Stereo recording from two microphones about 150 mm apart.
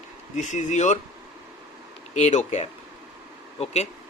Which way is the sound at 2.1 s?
50° left (ahead or behind).